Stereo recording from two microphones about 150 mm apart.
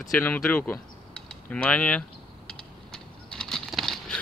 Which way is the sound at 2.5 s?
5° left (ahead or behind).